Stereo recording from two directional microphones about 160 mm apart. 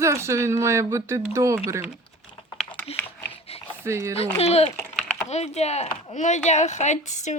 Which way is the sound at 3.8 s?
15° right (ahead or behind).